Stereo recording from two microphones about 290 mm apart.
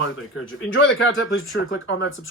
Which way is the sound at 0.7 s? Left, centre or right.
Left.